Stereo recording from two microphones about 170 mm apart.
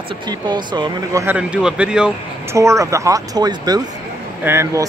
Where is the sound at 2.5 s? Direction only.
20° right (ahead or behind).